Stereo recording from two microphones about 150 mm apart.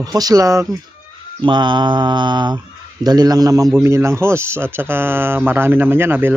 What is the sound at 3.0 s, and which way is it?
A man's voice, 25° right (ahead or behind).